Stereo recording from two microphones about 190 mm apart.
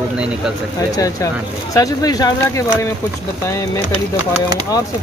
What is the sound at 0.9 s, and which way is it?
Speech, 15° left (ahead or behind).